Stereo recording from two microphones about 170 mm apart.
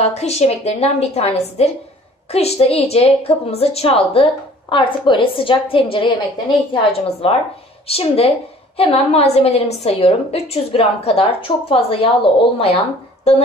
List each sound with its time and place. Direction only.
0.0 s a woman's voice: 40° left (ahead or behind)